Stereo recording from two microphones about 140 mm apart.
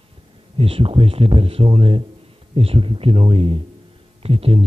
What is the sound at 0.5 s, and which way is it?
Speech, 40° right (ahead or behind).